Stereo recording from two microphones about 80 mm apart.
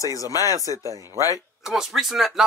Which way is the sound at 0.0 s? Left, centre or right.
Left.